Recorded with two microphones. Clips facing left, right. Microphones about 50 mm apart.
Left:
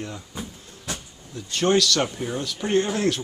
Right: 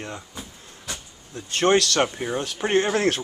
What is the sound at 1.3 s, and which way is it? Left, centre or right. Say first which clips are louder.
Speech: right 1 dB; right.